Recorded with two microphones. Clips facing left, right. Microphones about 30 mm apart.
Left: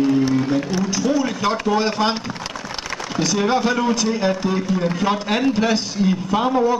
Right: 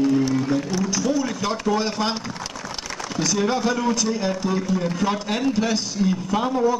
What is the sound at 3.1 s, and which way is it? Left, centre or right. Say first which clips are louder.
A man's voice: left 3 dB; centre.